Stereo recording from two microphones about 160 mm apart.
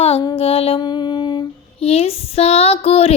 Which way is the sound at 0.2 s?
35° left (ahead or behind).